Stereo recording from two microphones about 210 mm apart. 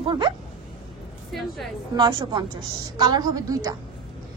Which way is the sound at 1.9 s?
20° right (ahead or behind).